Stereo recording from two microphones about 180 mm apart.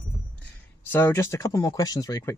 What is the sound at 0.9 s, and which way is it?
Speech, 10° left (ahead or behind).